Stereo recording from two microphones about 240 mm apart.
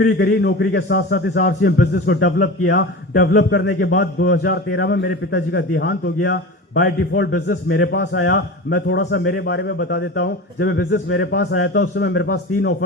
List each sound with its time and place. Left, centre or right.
0.2 s a man's voice: left